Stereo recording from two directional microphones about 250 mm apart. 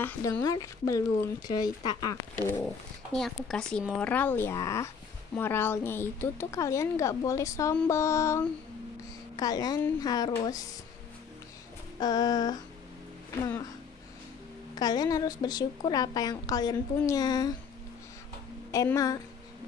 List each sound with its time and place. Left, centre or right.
0.0 s speech: centre
12.0 s speech: centre
14.8 s speech: centre
18.7 s speech: centre